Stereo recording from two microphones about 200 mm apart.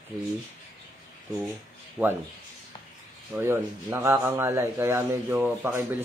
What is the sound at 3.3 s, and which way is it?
Speech, 10° right (ahead or behind).